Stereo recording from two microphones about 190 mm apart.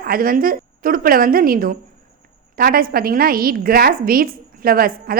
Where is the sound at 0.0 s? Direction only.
50° right (ahead or behind).